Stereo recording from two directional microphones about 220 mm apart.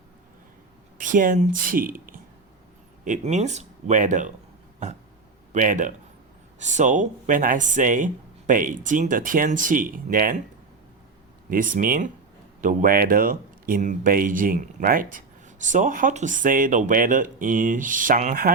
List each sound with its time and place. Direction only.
0.9 s speech: 35° right (ahead or behind)
5.5 s speech: 35° right (ahead or behind)
11.5 s speech: 40° right (ahead or behind)